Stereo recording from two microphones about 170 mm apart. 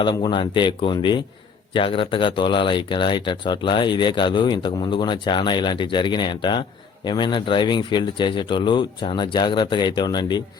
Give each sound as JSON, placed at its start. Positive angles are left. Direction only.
{"t": 0.0, "sound": "speech", "side_deg": 30}